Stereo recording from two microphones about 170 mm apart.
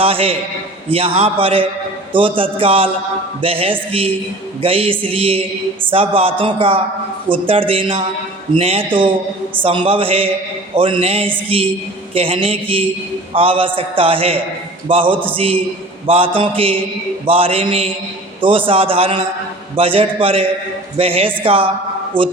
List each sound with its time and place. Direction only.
0.0 s a man's voice: 35° right (ahead or behind)